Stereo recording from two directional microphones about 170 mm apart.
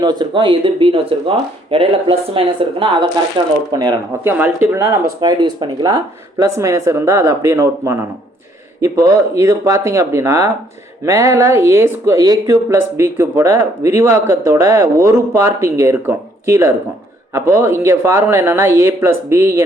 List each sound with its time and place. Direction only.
0.0 s speech: 25° right (ahead or behind)